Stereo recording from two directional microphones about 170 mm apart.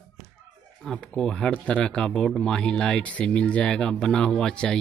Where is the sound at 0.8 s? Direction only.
5° left (ahead or behind).